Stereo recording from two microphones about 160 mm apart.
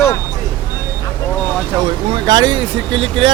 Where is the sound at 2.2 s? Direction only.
25° right (ahead or behind).